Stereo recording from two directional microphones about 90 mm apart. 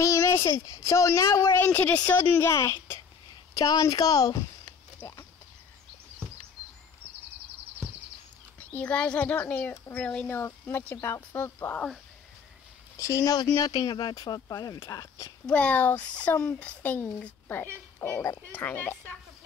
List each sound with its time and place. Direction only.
0.0 s a sound: 35° left (ahead or behind)
0.7 s a woman's voice: 35° left (ahead or behind); by 2.1 s 15° left (ahead or behind)
2.1 s a woman's voice: 30° left (ahead or behind)
5.0 s speech: 25° left (ahead or behind)
8.5 s a woman's voice: 15° left (ahead or behind)
10.2 s speech: 25° left (ahead or behind)
12.9 s a woman's voice: 35° left (ahead or behind)
15.4 s a child's voice: 15° left (ahead or behind)